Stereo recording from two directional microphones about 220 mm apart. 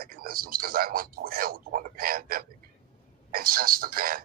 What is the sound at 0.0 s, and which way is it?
Speech, 40° right (ahead or behind).